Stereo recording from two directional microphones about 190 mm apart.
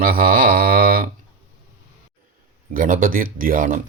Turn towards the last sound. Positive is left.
turn(degrees=-45)  # may be behind; listen again after turning